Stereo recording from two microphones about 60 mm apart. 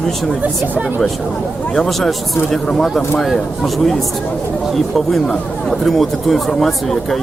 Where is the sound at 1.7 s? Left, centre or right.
Centre.